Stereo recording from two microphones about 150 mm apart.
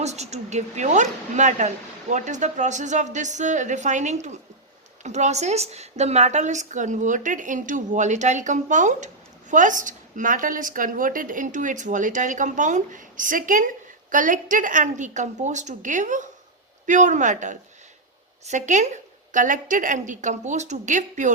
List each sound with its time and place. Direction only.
0.0 s a woman's voice: 45° right (ahead or behind)